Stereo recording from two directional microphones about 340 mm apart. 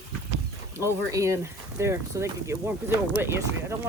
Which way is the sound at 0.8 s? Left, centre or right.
Centre.